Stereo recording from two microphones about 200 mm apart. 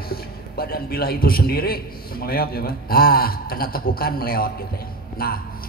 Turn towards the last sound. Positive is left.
turn(degrees=50)  # may be behind; listen again after turning